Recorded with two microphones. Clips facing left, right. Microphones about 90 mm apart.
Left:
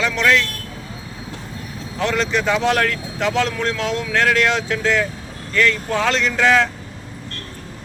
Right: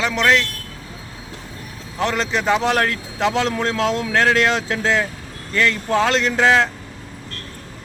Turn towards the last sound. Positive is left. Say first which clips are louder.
# even
turn(degrees=-30)  # may be behind; listen again after turning